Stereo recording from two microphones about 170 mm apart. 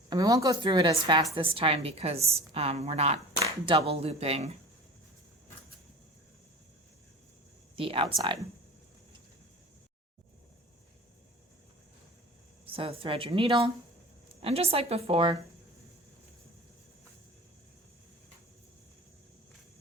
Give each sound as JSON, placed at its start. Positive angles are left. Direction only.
{"t": 0.1, "sound": "a woman's voice", "side_deg": -20}
{"t": 7.8, "sound": "a woman's voice", "side_deg": -30}
{"t": 12.6, "sound": "a woman's voice", "side_deg": -35}